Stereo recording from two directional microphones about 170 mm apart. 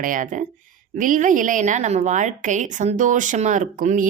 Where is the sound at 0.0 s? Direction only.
50° right (ahead or behind).